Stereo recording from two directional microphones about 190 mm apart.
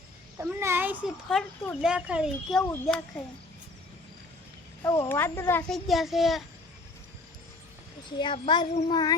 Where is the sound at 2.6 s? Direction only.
10° left (ahead or behind).